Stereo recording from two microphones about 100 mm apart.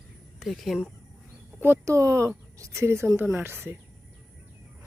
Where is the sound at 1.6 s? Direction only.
25° right (ahead or behind).